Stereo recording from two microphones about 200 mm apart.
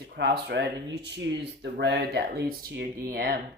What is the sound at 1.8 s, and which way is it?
Speech, 60° right (ahead or behind).